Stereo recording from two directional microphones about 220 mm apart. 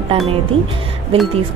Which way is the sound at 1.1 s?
25° right (ahead or behind).